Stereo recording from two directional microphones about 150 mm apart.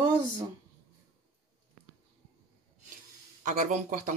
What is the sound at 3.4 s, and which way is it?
Speech, 60° right (ahead or behind).